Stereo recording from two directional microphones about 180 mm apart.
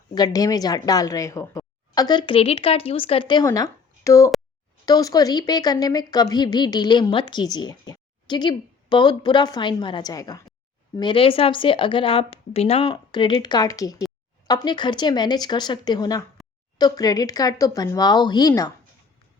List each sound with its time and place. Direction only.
0.1 s speech: 20° left (ahead or behind)